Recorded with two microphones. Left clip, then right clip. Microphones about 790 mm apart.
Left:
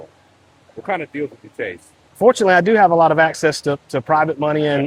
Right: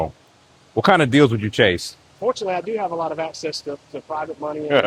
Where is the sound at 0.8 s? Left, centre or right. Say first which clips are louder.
Right 9 dB; right.